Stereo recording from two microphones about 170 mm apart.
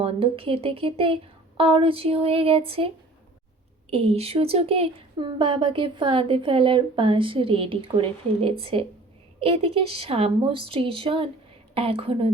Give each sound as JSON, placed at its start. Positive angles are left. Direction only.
{"t": 0.0, "sound": "speech", "side_deg": -30}